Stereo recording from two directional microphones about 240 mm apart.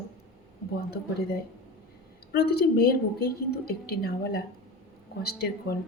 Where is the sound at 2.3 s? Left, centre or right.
Left.